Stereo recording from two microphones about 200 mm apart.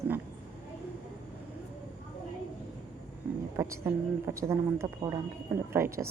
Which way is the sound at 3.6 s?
15° right (ahead or behind).